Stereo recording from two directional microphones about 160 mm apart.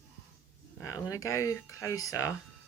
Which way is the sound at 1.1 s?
20° left (ahead or behind).